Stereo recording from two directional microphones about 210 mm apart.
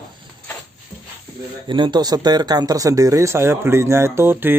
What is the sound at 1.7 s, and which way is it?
Speech, 20° right (ahead or behind).